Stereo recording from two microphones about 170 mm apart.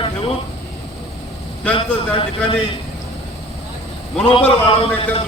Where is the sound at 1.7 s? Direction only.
30° left (ahead or behind).